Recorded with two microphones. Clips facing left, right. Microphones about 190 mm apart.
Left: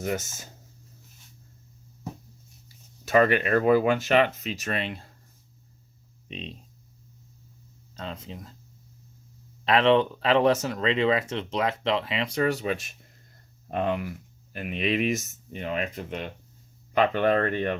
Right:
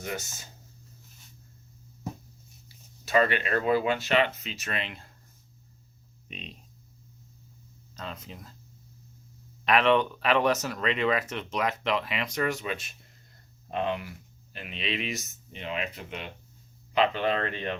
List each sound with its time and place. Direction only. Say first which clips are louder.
0.0 s speech: left 6 dB; 45° left (ahead or behind)
2.6 s speech: left 5 dB; 45° left (ahead or behind)
6.2 s speech: left 6 dB; 30° left (ahead or behind)
7.9 s speech: left 3 dB; 30° left (ahead or behind)
9.6 s speech: left 3 dB; 30° left (ahead or behind); by 17.7 s 50° left (ahead or behind)